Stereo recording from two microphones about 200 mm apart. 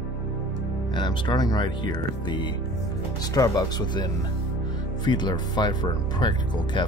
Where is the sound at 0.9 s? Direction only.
20° left (ahead or behind).